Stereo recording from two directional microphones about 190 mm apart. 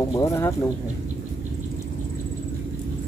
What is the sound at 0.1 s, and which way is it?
Speech, 15° left (ahead or behind).